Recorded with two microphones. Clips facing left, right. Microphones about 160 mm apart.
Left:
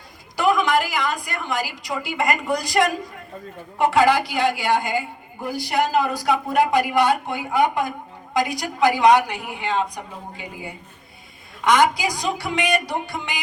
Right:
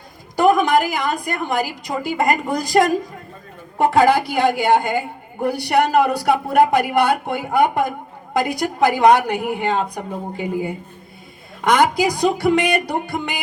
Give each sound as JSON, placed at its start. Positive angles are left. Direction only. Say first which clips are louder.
{"t": 0.3, "sound": "a woman's voice", "louder": "right 4 dB", "side_deg": -50}